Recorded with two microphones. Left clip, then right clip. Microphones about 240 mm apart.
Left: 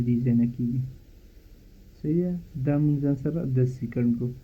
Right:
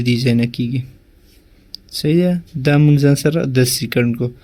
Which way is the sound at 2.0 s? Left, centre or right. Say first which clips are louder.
Right 12 dB; right.